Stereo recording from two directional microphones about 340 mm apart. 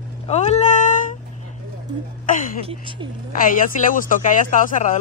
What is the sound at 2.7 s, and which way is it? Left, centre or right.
Speech, centre.